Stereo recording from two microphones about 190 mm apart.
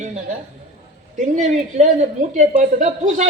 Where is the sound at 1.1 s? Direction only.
40° right (ahead or behind).